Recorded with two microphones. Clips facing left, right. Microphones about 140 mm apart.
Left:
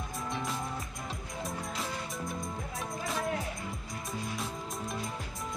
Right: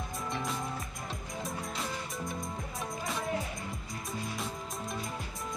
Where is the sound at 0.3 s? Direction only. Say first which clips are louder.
Even; centre (ahead or behind).